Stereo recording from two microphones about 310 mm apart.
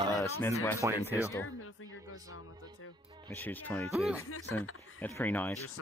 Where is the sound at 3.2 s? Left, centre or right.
Centre.